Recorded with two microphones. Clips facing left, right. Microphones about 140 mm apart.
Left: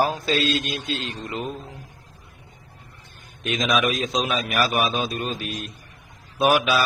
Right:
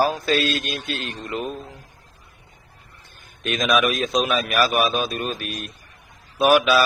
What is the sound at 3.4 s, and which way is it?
A man's voice, 20° left (ahead or behind).